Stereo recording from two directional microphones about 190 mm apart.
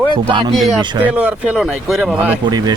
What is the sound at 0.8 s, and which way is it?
Speech, 25° right (ahead or behind).